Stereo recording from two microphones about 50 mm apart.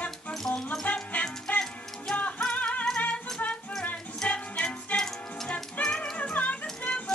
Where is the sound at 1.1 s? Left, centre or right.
Left.